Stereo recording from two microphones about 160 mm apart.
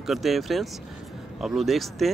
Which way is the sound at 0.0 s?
Centre (ahead or behind).